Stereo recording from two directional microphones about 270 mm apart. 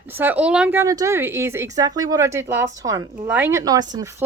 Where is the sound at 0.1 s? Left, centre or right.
Centre.